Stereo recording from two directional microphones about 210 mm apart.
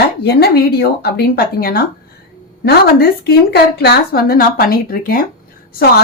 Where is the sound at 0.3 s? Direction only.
50° left (ahead or behind).